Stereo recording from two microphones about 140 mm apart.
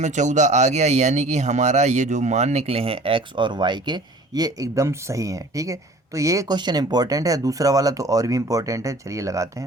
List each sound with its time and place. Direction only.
0.0 s speech: 60° right (ahead or behind); by 9.6 s 20° right (ahead or behind)